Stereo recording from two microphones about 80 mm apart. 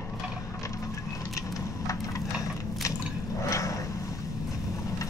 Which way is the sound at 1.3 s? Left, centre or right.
Left.